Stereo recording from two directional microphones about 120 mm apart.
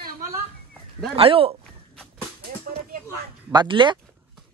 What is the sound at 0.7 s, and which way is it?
Dog, centre (ahead or behind).